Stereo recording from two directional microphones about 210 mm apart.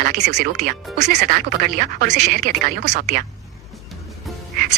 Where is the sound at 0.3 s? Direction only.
55° right (ahead or behind).